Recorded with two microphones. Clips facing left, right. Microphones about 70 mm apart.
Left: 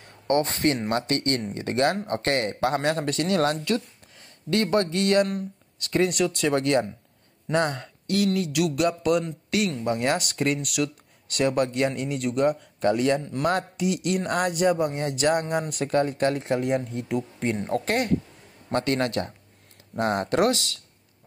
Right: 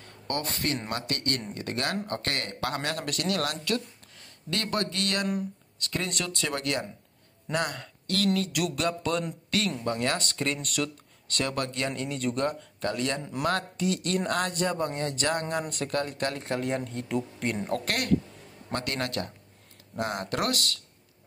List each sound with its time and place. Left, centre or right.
0.3 s speech: left
8.1 s a man's voice: centre
8.5 s a man's voice: centre; by 11.9 s left
11.9 s a man's voice: centre
12.8 s a man's voice: centre
16.4 s a man's voice: centre